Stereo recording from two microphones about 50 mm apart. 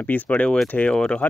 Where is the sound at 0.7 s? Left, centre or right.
Centre.